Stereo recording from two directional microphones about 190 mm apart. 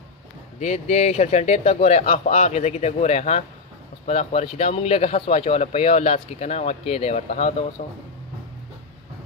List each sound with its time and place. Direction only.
0.6 s speech: 35° left (ahead or behind)